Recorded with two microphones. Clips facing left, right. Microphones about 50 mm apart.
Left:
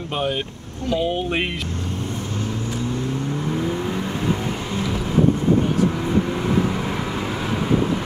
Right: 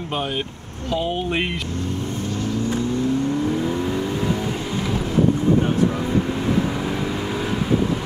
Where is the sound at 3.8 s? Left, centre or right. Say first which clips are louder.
Right 1 dB; left.